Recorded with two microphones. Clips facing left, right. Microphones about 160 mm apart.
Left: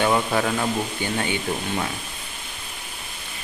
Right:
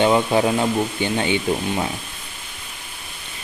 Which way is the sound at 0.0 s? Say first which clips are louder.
Right 4 dB; 20° right (ahead or behind).